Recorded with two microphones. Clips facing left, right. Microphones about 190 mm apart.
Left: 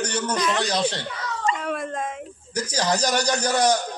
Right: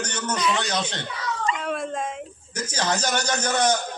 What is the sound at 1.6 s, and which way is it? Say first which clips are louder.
Dog: even; centre (ahead or behind).